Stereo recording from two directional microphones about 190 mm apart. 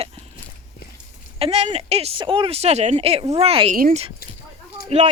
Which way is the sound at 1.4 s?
30° right (ahead or behind).